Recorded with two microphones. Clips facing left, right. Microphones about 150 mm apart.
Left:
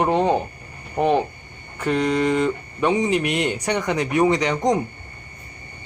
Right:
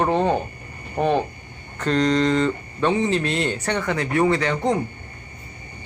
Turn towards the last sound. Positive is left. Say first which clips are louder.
# left 1 dB
turn(degrees=15)  # may be behind; listen again after turning